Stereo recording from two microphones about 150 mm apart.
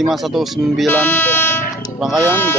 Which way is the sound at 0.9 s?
15° left (ahead or behind).